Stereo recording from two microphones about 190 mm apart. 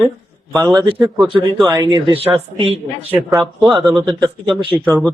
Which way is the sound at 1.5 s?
10° right (ahead or behind).